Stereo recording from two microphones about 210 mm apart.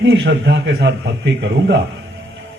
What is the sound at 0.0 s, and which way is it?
A man's voice, 60° right (ahead or behind).